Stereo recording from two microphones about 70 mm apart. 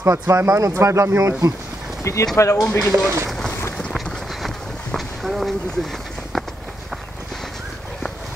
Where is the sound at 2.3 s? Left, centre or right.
Left.